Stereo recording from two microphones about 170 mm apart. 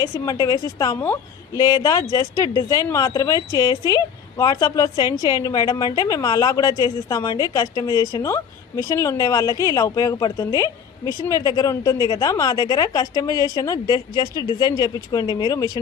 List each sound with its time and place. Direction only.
0.0 s a woman's voice: 20° left (ahead or behind)